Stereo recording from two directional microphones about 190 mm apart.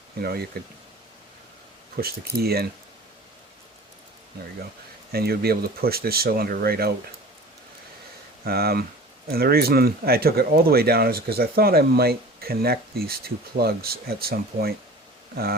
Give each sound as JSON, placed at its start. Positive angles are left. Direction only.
{"t": 0.2, "sound": "speech", "side_deg": -55}
{"t": 2.0, "sound": "speech", "side_deg": -55}
{"t": 5.1, "sound": "speech", "side_deg": -55}
{"t": 8.4, "sound": "speech", "side_deg": -55}